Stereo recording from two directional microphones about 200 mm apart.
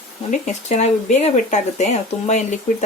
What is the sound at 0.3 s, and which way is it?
Speech, 35° left (ahead or behind).